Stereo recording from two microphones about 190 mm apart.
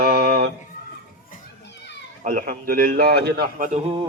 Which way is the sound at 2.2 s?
45° right (ahead or behind).